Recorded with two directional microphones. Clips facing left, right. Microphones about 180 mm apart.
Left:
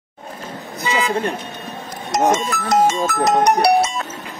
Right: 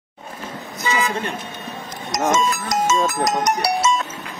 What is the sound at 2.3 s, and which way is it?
Speech, 60° left (ahead or behind).